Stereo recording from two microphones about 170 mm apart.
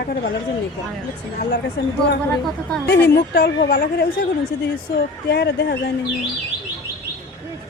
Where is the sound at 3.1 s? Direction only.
70° left (ahead or behind).